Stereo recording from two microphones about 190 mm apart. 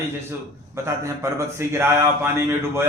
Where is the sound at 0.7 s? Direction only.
15° right (ahead or behind).